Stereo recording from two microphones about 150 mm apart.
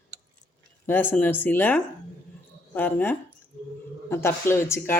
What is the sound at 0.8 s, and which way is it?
Speech, 15° left (ahead or behind).